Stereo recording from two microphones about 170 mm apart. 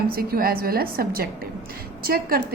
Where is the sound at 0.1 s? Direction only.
60° right (ahead or behind).